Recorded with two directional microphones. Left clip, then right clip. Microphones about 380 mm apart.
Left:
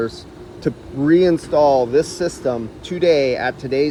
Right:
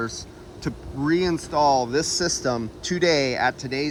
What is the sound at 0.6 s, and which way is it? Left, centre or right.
Speech, centre.